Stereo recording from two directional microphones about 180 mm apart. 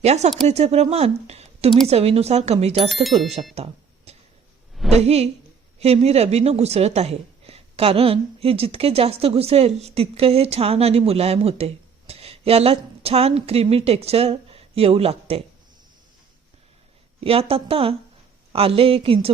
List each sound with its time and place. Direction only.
0.0 s a woman's voice: 40° right (ahead or behind)
3.5 s a sound: 35° right (ahead or behind)
4.9 s a woman's voice: 35° right (ahead or behind)
17.2 s a woman's voice: 30° right (ahead or behind)